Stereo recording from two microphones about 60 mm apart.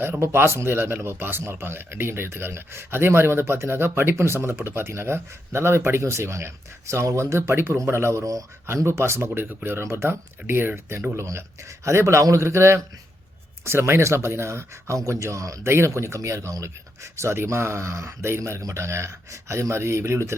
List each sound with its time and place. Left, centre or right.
0.2 s speech: right
8.2 s speech: right
8.6 s a man's voice: right